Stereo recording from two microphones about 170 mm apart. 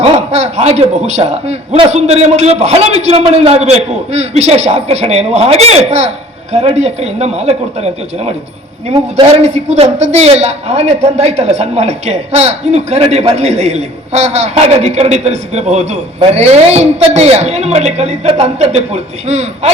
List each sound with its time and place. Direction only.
0.0 s a man's voice: 40° right (ahead or behind)